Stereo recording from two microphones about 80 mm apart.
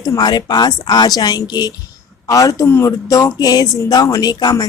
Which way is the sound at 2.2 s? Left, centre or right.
Left.